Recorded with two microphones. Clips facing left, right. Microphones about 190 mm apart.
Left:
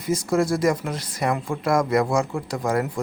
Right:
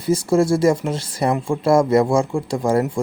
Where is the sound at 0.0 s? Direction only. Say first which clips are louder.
Right 5 dB; 30° right (ahead or behind).